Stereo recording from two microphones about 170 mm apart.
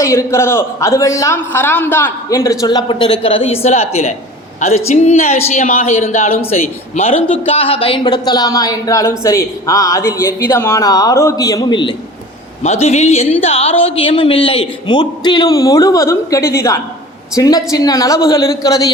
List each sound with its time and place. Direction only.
0.0 s a man's voice: 15° left (ahead or behind)
12.6 s speech: 40° left (ahead or behind); by 18.9 s 20° left (ahead or behind)